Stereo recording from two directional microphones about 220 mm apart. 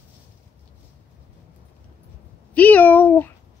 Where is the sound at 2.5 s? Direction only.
5° left (ahead or behind).